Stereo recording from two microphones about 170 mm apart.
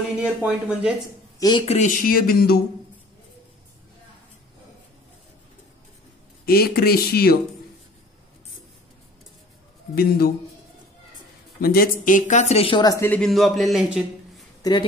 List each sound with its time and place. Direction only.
0.2 s speech: 5° right (ahead or behind)
1.7 s speech: 45° left (ahead or behind); by 2.6 s 65° left (ahead or behind)
6.4 s speech: 65° left (ahead or behind)
9.9 s speech: 65° left (ahead or behind)
11.6 s speech: 60° left (ahead or behind); by 13.2 s 15° left (ahead or behind)
13.2 s a man's voice: centre (ahead or behind)
14.6 s speech: 25° left (ahead or behind)